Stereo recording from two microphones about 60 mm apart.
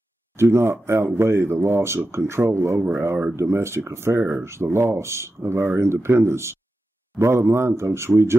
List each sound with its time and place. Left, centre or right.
0.4 s speech: right